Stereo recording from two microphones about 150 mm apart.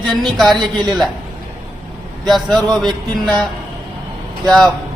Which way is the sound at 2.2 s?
Centre (ahead or behind).